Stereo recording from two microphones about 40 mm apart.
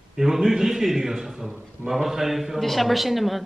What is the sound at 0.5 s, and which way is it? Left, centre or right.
A man's voice, centre.